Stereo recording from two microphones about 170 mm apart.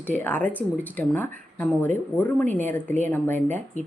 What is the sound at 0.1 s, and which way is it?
A woman's voice, 10° left (ahead or behind).